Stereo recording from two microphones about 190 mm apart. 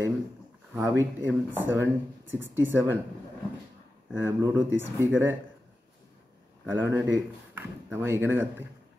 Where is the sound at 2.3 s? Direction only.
10° right (ahead or behind).